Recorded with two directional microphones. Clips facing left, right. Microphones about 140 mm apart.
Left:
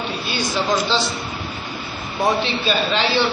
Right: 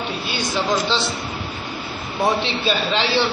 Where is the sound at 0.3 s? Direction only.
20° right (ahead or behind).